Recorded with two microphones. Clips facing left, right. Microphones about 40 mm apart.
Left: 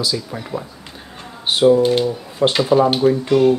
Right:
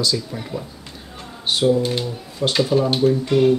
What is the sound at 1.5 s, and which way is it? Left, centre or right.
Speech, centre.